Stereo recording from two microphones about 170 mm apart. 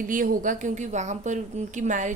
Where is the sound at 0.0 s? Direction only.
50° right (ahead or behind).